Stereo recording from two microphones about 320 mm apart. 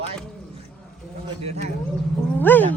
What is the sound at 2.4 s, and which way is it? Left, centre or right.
Speech, centre.